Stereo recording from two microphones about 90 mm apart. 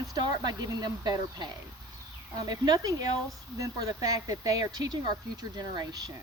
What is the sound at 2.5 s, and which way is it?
Speech, 45° right (ahead or behind).